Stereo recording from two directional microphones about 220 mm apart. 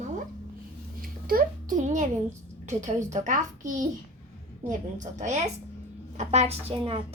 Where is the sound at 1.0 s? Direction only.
40° right (ahead or behind).